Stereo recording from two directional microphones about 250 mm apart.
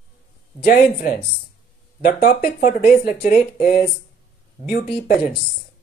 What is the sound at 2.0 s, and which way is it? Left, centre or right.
Speech, left.